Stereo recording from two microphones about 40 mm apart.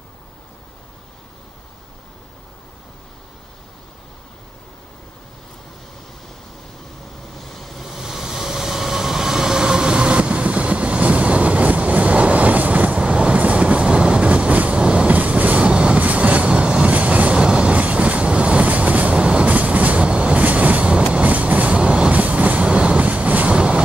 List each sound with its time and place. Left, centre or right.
7.3 s train: centre; by 19.5 s right
19.5 s train: right
22.1 s train: right